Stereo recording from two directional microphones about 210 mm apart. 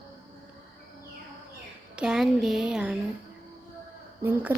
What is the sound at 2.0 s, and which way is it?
Speech, 5° right (ahead or behind).